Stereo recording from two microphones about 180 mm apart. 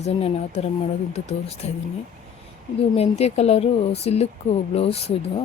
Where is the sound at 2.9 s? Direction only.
35° left (ahead or behind).